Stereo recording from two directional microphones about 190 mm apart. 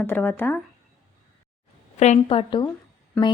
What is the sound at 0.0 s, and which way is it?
Speech, 10° left (ahead or behind).